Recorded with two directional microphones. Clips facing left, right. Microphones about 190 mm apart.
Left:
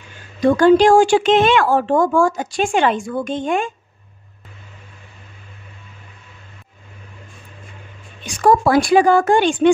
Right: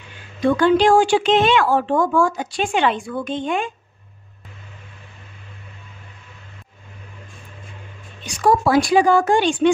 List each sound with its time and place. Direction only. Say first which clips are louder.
0.4 s speech: left 4 dB; 40° left (ahead or behind)
8.4 s speech: left 2 dB; 55° left (ahead or behind)